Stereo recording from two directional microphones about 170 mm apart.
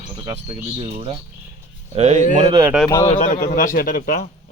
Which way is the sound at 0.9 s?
30° right (ahead or behind).